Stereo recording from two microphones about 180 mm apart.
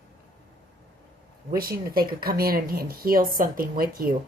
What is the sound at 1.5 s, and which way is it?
A woman's voice, 55° right (ahead or behind).